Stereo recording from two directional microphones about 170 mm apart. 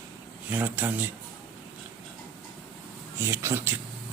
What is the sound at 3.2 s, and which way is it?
Speech, 15° right (ahead or behind).